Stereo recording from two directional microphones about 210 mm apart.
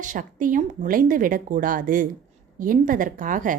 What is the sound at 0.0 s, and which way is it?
A woman's voice, 40° right (ahead or behind).